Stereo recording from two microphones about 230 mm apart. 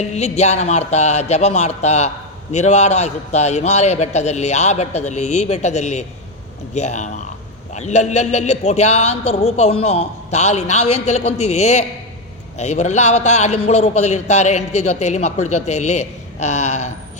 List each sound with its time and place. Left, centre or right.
0.0 s a man's voice: left